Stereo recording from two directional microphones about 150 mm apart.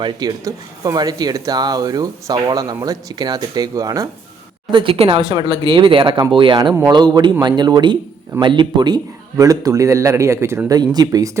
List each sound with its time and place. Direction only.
0.0 s speech: 25° right (ahead or behind)
4.7 s speech: 35° right (ahead or behind)